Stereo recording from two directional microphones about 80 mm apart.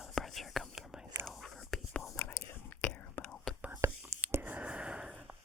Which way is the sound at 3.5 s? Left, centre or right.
Centre.